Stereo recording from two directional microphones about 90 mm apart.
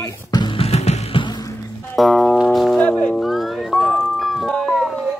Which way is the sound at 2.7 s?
10° left (ahead or behind).